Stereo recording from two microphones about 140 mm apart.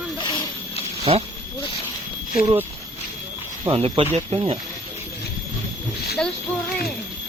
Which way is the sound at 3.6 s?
45° right (ahead or behind).